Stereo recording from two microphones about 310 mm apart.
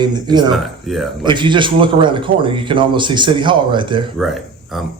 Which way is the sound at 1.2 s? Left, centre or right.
Centre.